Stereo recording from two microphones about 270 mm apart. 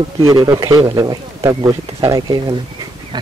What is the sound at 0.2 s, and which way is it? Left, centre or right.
Speech, centre.